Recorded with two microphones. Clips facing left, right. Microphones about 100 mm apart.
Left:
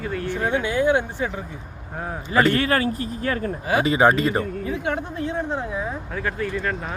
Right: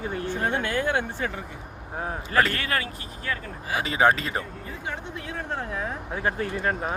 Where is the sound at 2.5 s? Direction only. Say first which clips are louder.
Left 8 dB; 30° left (ahead or behind).